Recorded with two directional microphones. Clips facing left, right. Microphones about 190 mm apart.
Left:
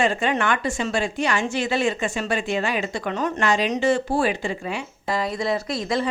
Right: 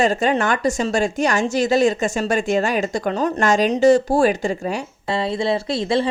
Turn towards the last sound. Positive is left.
turn(degrees=-30)  # may be behind; listen again after turning